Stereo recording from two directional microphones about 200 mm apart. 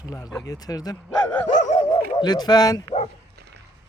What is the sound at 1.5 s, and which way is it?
Dog, 35° left (ahead or behind).